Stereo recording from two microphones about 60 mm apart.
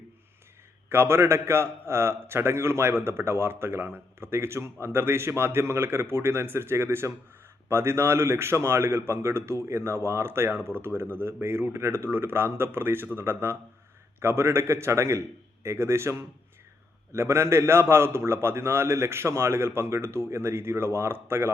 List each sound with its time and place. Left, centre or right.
0.9 s a man's voice: right